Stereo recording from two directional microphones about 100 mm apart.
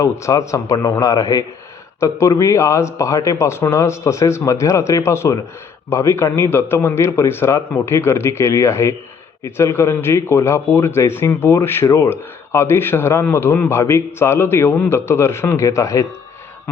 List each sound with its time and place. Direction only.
0.0 s speech: 30° left (ahead or behind)